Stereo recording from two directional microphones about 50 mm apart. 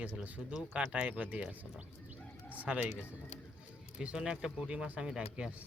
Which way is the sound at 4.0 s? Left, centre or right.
Centre.